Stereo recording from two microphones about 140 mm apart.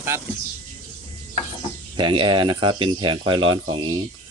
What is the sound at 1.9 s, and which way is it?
Speech, 35° right (ahead or behind).